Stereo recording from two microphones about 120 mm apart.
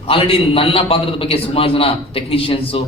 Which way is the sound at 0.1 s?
50° left (ahead or behind).